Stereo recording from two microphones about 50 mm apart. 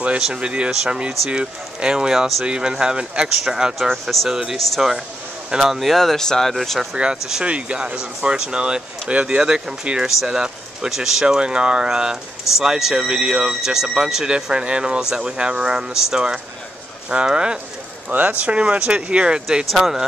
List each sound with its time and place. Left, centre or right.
0.0 s speech: right
3.7 s speech: centre
7.4 s speech: right